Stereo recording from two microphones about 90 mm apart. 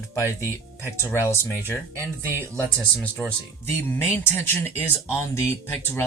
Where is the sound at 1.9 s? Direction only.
25° right (ahead or behind).